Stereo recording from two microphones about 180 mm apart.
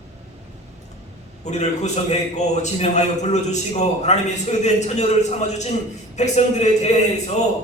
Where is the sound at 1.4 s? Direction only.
40° left (ahead or behind).